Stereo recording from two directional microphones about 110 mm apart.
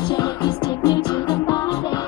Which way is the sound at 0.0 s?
40° left (ahead or behind).